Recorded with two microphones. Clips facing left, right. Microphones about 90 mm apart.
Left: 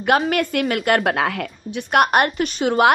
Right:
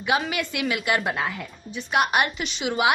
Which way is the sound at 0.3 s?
50° left (ahead or behind).